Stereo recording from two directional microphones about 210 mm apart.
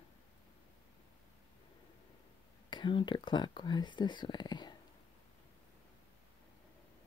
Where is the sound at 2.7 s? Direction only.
20° left (ahead or behind).